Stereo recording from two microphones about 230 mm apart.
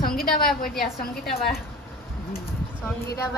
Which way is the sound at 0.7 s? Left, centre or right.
Centre.